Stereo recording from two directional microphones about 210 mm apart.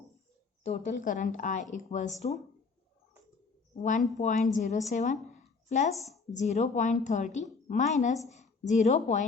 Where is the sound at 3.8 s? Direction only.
35° left (ahead or behind).